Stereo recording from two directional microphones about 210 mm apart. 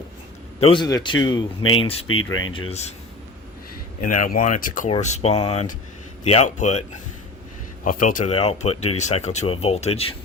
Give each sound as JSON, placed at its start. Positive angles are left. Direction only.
{"t": 0.6, "sound": "a man's voice", "side_deg": 25}
{"t": 2.0, "sound": "speech", "side_deg": 75}
{"t": 2.5, "sound": "a man's voice", "side_deg": 25}
{"t": 4.0, "sound": "speech", "side_deg": 40}
{"t": 7.9, "sound": "speech", "side_deg": 40}